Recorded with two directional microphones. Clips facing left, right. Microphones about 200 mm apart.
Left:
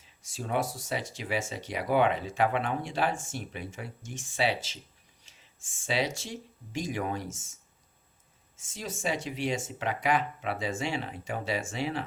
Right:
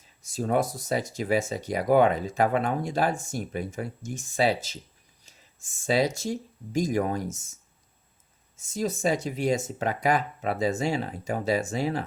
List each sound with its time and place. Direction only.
0.0 s speech: 40° right (ahead or behind)
8.7 s speech: 45° right (ahead or behind)